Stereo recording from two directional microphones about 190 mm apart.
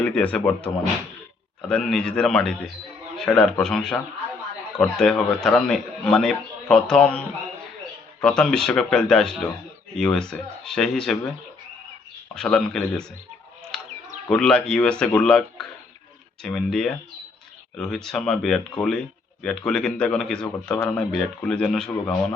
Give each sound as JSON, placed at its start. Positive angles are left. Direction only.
{"t": 0.0, "sound": "speech", "side_deg": 5}
{"t": 12.3, "sound": "speech", "side_deg": 5}
{"t": 14.3, "sound": "speech", "side_deg": 5}